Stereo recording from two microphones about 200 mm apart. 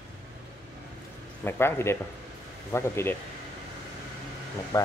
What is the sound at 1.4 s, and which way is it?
Speech, 10° left (ahead or behind).